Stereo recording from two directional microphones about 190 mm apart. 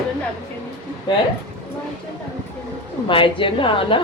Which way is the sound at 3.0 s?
25° left (ahead or behind).